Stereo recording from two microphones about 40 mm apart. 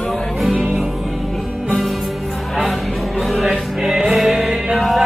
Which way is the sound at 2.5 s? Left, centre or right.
Centre.